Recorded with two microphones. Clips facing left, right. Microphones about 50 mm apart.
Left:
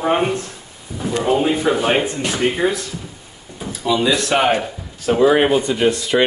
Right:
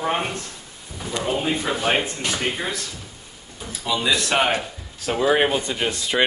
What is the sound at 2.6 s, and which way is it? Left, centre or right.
Speech, left.